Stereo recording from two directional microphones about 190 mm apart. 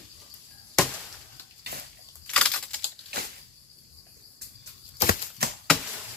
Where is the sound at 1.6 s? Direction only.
55° right (ahead or behind).